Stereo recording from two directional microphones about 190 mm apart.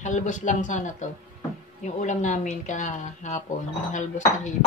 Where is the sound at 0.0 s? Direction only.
40° left (ahead or behind).